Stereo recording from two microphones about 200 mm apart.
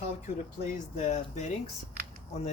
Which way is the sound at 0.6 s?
35° left (ahead or behind).